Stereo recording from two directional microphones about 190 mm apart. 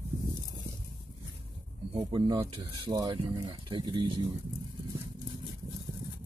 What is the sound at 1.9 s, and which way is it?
Speech, 30° right (ahead or behind).